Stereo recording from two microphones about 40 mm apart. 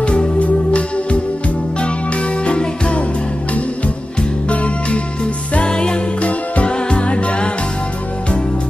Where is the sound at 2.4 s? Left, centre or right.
Left.